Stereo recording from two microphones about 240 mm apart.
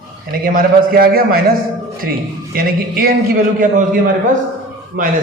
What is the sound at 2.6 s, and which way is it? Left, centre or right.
A man's voice, right.